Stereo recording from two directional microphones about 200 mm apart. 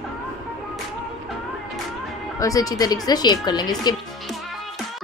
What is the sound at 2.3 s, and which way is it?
A woman's voice, 15° left (ahead or behind).